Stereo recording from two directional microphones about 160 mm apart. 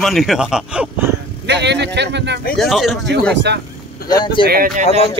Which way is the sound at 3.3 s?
90° right.